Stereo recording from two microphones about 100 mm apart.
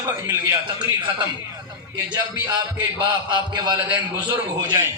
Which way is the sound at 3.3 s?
50° right (ahead or behind).